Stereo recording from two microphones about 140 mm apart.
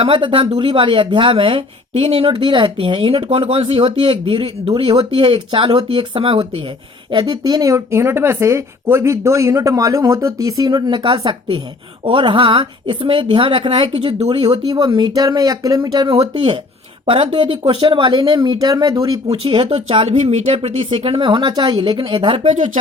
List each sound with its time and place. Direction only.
0.0 s speech: 35° right (ahead or behind)
14.4 s speech: 30° right (ahead or behind)
16.0 s speech: 40° right (ahead or behind); by 19.2 s 25° right (ahead or behind)
19.3 s speech: 45° right (ahead or behind)
20.9 s speech: 40° right (ahead or behind)
22.5 s speech: 65° right (ahead or behind)